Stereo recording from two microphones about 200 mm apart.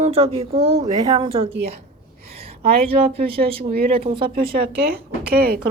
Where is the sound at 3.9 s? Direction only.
30° right (ahead or behind).